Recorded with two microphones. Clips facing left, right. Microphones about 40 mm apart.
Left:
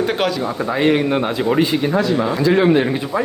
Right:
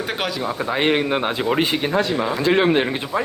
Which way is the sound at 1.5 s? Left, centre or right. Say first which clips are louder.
Left 4 dB; right.